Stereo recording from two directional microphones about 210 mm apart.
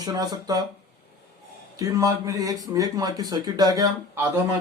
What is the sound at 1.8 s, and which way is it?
Speech, 15° right (ahead or behind).